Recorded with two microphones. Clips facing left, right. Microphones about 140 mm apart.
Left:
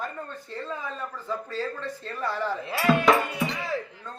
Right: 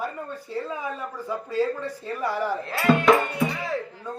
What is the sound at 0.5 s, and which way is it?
A man's voice, 10° right (ahead or behind).